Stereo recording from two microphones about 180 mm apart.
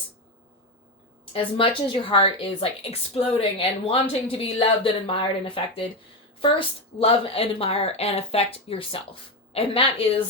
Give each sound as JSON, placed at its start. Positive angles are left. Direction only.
{"t": 1.3, "sound": "a woman's voice", "side_deg": 30}